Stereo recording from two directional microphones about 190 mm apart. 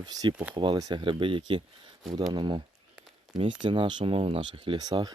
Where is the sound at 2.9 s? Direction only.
Centre (ahead or behind).